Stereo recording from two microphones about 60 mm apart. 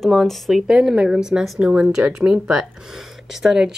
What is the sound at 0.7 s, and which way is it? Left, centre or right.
A woman's voice, centre.